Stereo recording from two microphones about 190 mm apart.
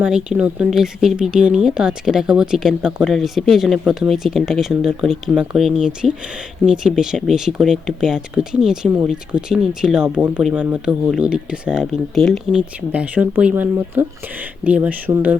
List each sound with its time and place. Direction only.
0.0 s speech: 5° right (ahead or behind)